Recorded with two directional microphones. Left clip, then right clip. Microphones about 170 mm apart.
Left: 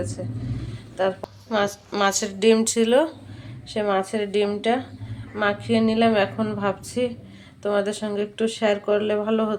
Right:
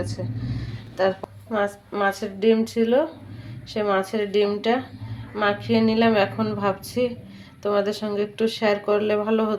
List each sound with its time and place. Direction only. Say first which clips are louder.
0.0 s speech: even; 5° right (ahead or behind)
0.9 s a sound: right 1 dB; 5° right (ahead or behind)
1.6 s a woman's voice: even; 5° right (ahead or behind)
2.1 s speech: left 3 dB; 15° left (ahead or behind)
2.7 s a woman's voice: left 1 dB; centre (ahead or behind)